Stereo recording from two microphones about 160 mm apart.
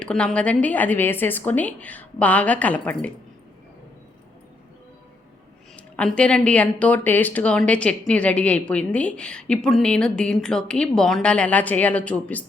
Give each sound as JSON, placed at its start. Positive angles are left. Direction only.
{"t": 0.0, "sound": "a woman's voice", "side_deg": 5}
{"t": 5.7, "sound": "a woman's voice", "side_deg": 5}